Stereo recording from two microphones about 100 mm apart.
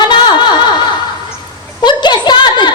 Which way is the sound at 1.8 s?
50° left (ahead or behind).